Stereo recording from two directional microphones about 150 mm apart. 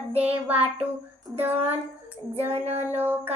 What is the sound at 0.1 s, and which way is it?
Child singing, 45° right (ahead or behind).